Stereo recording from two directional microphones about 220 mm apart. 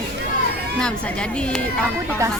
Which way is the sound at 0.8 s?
5° left (ahead or behind).